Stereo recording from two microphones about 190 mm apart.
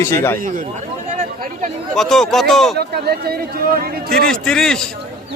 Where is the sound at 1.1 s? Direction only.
40° right (ahead or behind).